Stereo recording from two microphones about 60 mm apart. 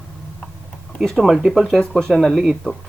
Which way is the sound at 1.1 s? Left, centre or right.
Centre.